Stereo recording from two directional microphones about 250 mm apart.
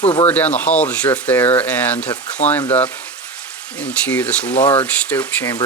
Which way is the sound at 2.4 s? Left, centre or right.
Left.